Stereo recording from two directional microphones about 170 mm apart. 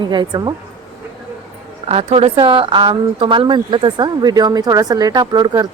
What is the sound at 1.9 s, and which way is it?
Speech, 35° right (ahead or behind).